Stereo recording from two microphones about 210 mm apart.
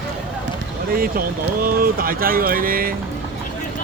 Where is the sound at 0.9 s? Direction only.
45° right (ahead or behind).